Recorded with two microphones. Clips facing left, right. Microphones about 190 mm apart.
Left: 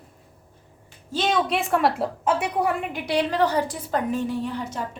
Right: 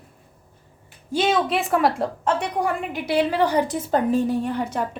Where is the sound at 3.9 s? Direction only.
35° right (ahead or behind).